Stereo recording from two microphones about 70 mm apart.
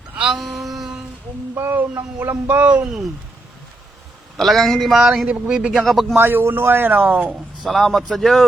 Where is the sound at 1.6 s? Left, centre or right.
Right.